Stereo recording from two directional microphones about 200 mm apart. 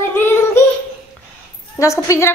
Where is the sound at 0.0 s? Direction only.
10° left (ahead or behind).